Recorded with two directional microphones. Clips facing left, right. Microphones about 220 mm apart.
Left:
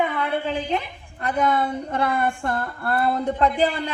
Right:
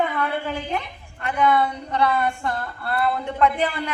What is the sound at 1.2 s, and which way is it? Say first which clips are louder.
A woman's voice: right 1 dB; 40° left (ahead or behind).